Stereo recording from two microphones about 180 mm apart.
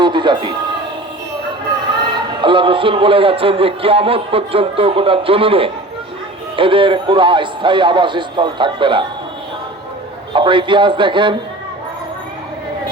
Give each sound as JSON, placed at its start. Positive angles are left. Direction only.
{"t": 0.0, "sound": "a sound", "side_deg": -25}
{"t": 2.4, "sound": "a man's voice", "side_deg": -25}
{"t": 10.3, "sound": "a man's voice", "side_deg": -25}